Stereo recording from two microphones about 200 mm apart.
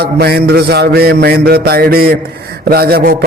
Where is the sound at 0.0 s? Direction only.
50° right (ahead or behind).